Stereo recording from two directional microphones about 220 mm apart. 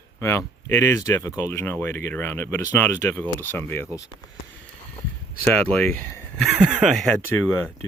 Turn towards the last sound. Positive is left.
turn(degrees=10)  # may be behind; listen again after turning